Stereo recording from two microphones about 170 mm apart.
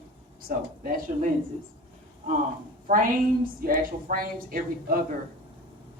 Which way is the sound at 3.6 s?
55° right (ahead or behind).